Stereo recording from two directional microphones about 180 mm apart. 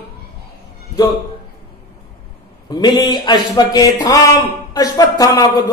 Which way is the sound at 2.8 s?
25° left (ahead or behind).